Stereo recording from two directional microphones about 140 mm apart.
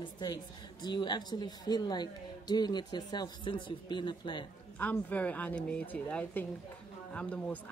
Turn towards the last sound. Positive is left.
turn(degrees=10)  # may be behind; listen again after turning